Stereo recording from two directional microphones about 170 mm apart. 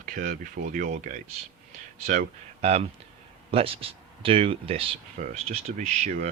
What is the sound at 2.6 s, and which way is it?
Speech, 40° right (ahead or behind).